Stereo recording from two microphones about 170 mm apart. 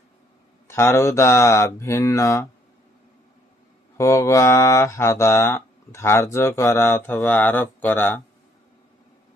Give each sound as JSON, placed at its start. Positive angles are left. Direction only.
{"t": 0.7, "sound": "mantra", "side_deg": 15}
{"t": 3.9, "sound": "mantra", "side_deg": 15}